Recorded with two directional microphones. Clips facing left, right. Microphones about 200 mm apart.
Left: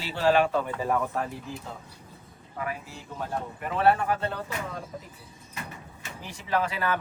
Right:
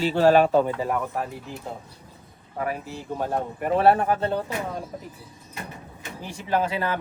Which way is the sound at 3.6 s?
40° right (ahead or behind).